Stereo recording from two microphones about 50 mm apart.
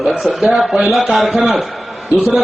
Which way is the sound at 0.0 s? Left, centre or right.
Centre.